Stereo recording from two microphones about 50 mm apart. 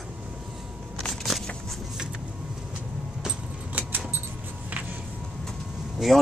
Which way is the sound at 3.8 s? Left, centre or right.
Right.